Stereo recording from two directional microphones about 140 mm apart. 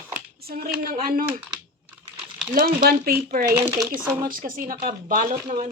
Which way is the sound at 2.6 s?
90° right.